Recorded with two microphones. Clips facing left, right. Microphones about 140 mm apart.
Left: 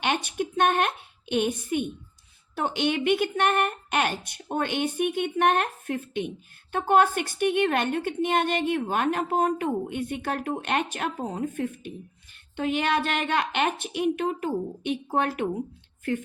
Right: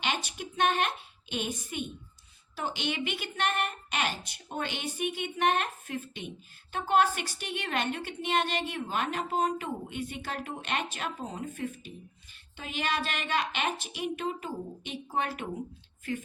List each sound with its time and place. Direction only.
0.0 s a woman's voice: 55° left (ahead or behind)